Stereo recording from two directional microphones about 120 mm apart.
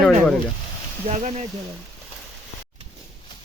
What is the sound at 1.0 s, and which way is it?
Speech, 65° right (ahead or behind).